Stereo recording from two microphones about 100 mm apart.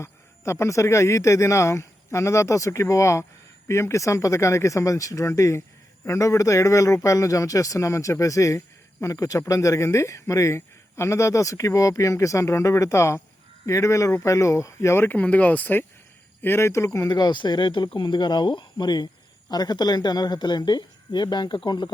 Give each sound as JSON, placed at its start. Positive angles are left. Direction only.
{"t": 0.0, "sound": "a man's voice", "side_deg": 25}
{"t": 17.1, "sound": "speech", "side_deg": 45}